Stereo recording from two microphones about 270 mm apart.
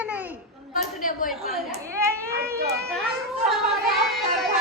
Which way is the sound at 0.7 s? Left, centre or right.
Left.